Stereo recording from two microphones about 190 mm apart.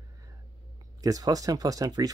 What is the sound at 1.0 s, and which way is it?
Speech, 20° right (ahead or behind).